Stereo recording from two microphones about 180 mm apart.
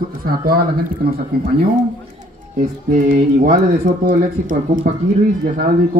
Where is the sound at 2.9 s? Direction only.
45° right (ahead or behind).